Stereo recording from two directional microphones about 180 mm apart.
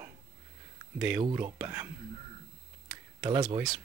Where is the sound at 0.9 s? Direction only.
5° right (ahead or behind).